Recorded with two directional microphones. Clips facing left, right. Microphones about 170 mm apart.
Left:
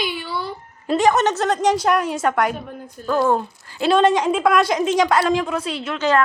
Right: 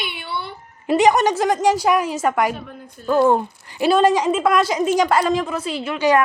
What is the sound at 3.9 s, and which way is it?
A woman's voice, 5° right (ahead or behind).